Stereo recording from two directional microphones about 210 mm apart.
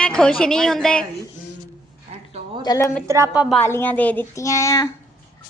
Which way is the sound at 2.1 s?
30° right (ahead or behind).